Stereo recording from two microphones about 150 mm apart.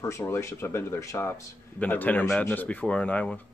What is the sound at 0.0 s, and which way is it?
A man's voice, 15° left (ahead or behind).